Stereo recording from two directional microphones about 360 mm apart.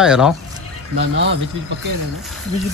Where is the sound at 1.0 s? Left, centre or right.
Right.